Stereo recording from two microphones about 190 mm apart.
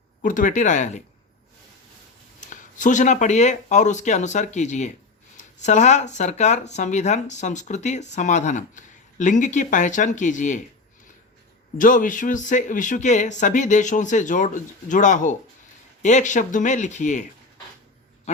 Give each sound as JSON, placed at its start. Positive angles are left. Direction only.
{"t": 0.2, "sound": "speech", "side_deg": 45}
{"t": 2.4, "sound": "speech", "side_deg": 40}
{"t": 11.8, "sound": "speech", "side_deg": 45}